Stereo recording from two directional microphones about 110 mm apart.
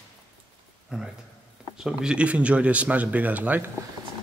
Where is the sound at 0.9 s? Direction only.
5° right (ahead or behind).